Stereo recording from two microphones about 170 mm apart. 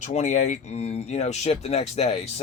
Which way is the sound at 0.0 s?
45° left (ahead or behind).